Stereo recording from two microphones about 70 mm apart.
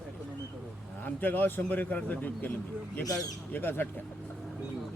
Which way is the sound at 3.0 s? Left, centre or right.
Left.